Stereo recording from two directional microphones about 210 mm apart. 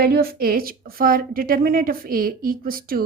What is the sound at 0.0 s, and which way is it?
Speech, 45° right (ahead or behind).